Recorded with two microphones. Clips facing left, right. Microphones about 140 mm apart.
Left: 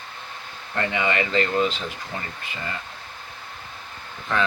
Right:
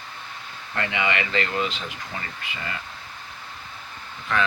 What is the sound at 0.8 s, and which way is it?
Speech, 40° left (ahead or behind).